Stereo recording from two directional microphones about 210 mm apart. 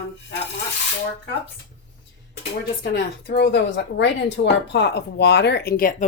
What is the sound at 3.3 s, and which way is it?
A woman's voice, 50° left (ahead or behind).